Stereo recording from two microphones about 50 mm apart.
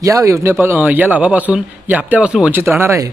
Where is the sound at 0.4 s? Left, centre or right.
Right.